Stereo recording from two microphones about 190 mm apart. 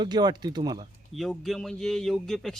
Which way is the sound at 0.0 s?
20° right (ahead or behind).